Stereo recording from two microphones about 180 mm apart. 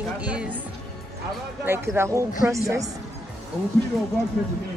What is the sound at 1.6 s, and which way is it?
Speech, 15° right (ahead or behind).